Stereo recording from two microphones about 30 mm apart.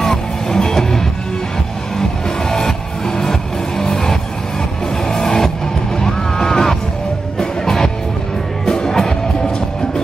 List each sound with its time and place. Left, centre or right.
0.0 s music: centre
3.2 s music: centre